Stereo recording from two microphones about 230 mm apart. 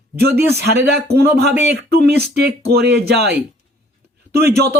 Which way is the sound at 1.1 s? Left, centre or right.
Right.